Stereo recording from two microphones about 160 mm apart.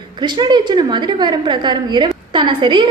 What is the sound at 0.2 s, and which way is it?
A woman's voice, 30° right (ahead or behind).